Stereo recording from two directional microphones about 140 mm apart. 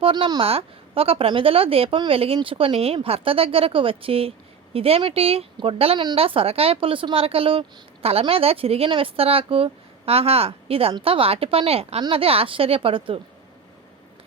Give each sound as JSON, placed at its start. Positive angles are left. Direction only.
{"t": 0.0, "sound": "a woman's voice", "side_deg": -35}